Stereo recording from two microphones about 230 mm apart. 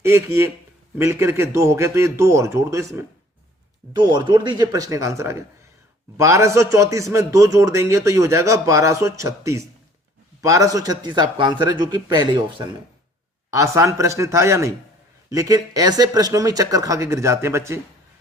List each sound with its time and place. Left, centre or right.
0.0 s speech: centre